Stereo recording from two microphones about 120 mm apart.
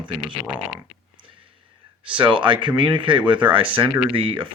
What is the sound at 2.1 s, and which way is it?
Speech, 45° right (ahead or behind).